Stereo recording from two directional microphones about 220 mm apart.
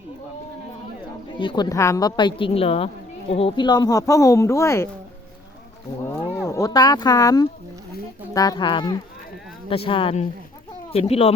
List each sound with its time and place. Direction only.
1.4 s a woman's voice: 20° left (ahead or behind)
6.4 s a woman's voice: 15° left (ahead or behind)